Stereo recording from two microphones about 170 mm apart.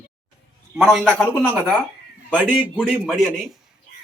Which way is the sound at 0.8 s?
Centre (ahead or behind).